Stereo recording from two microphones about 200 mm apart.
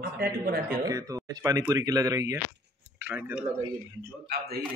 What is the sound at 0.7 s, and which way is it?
Speech, 15° right (ahead or behind).